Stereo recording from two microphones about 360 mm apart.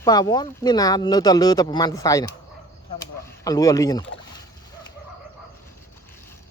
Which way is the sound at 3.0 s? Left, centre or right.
Centre.